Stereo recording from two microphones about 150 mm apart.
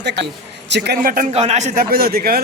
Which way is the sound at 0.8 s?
80° right.